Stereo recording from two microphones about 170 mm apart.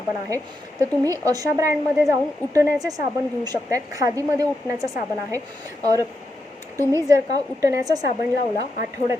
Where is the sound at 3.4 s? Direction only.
20° right (ahead or behind).